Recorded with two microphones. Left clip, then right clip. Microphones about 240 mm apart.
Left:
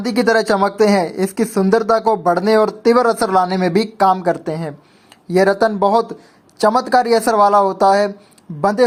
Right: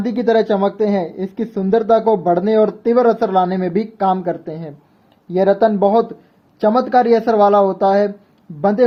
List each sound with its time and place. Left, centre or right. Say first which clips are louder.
0.2 s speech: left 1 dB; centre